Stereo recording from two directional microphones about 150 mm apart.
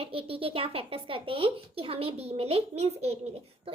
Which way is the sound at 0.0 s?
40° right (ahead or behind).